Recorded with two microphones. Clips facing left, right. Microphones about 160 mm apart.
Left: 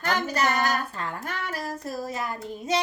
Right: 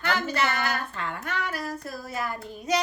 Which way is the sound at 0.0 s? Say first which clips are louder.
Left 1 dB; 40° left (ahead or behind).